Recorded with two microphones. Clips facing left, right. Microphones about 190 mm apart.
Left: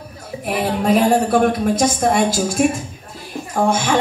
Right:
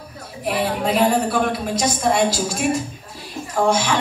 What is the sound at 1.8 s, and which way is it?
Speech, 50° left (ahead or behind).